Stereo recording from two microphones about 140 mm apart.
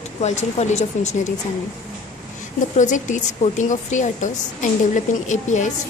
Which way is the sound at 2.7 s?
60° left (ahead or behind).